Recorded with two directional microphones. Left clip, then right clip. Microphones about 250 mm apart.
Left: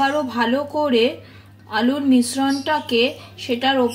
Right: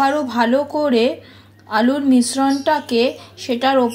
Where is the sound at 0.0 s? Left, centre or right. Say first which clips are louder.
Right 3 dB; centre.